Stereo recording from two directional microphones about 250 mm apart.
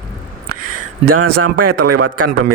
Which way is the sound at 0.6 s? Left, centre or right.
Right.